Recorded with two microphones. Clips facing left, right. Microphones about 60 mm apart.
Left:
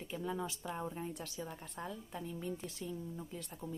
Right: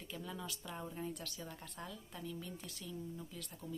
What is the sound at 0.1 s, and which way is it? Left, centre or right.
Speech, left.